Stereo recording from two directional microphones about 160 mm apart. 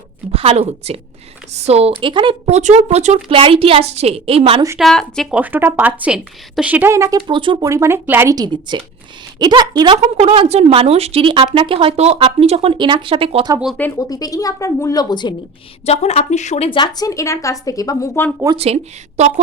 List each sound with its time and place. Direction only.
0.3 s a woman's voice: 40° right (ahead or behind)
2.6 s speech: 45° right (ahead or behind)
3.2 s speech: 35° right (ahead or behind)
4.8 s speech: 5° left (ahead or behind)
5.3 s speech: 10° right (ahead or behind)
7.3 s speech: 30° right (ahead or behind)
10.2 s speech: 40° right (ahead or behind)
14.1 s a woman's voice: 25° left (ahead or behind)
15.9 s a woman's voice: 40° left (ahead or behind); by 18.3 s 20° left (ahead or behind)
18.5 s speech: 40° right (ahead or behind)